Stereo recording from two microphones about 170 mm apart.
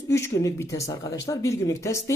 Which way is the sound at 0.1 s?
15° left (ahead or behind).